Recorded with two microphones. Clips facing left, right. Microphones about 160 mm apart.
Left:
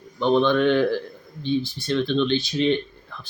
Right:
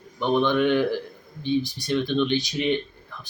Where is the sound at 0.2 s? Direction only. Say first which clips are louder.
Left 2 dB; 15° right (ahead or behind).